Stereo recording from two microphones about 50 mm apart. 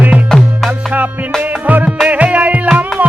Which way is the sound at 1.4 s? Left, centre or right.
Right.